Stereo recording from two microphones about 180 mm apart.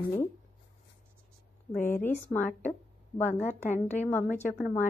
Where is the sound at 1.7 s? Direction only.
45° left (ahead or behind).